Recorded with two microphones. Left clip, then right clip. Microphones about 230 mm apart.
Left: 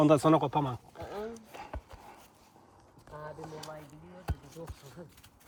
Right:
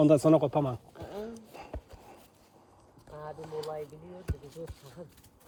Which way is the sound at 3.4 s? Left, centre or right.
Centre.